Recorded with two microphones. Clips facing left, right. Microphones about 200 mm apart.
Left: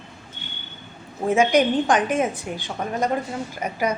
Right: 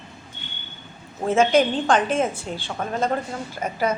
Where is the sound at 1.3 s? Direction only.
15° left (ahead or behind).